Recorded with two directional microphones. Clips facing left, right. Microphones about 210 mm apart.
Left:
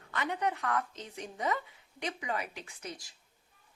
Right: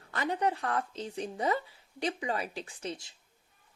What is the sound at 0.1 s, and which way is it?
Speech, 35° right (ahead or behind).